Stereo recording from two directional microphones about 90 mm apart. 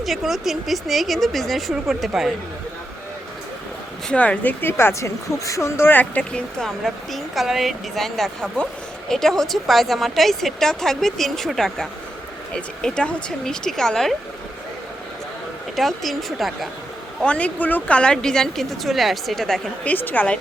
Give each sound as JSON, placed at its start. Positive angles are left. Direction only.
{"t": 0.0, "sound": "a woman's voice", "side_deg": 0}
{"t": 4.1, "sound": "a woman's voice", "side_deg": 15}
{"t": 6.6, "sound": "a woman's voice", "side_deg": 0}
{"t": 15.7, "sound": "a woman's voice", "side_deg": 0}
{"t": 17.2, "sound": "a woman's voice", "side_deg": 15}
{"t": 19.8, "sound": "a woman's voice", "side_deg": 20}